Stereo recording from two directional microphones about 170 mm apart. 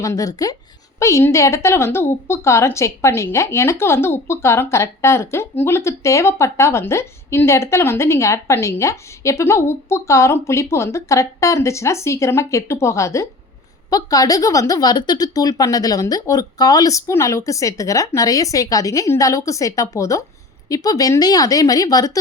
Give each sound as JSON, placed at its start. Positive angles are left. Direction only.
{"t": 0.0, "sound": "a woman's voice", "side_deg": 20}